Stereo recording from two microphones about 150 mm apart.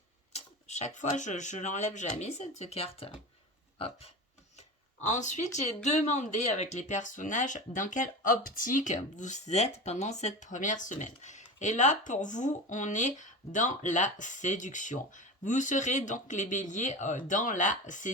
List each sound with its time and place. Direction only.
0.3 s speech: 45° left (ahead or behind)
5.0 s speech: 50° left (ahead or behind)